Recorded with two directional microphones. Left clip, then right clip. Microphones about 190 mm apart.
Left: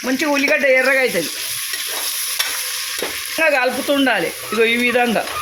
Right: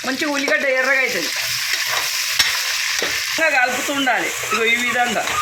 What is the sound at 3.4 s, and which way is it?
Frying, 50° left (ahead or behind).